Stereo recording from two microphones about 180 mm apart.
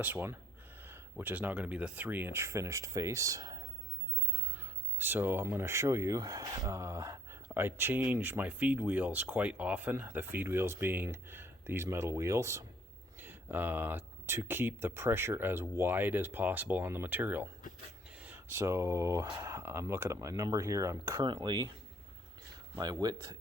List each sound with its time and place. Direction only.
0.0 s speech: 10° right (ahead or behind)
22.7 s speech: 20° right (ahead or behind)